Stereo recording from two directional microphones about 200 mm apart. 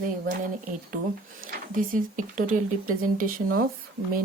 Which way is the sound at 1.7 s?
40° right (ahead or behind).